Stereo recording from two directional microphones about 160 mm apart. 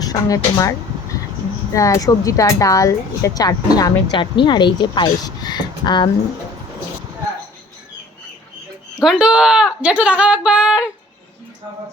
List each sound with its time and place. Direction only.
0.0 s speech: 20° left (ahead or behind)
1.7 s speech: 20° left (ahead or behind)
9.0 s a woman's voice: 5° right (ahead or behind)